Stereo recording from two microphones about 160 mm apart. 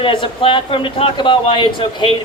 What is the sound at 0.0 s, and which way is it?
A woman's voice, 35° left (ahead or behind).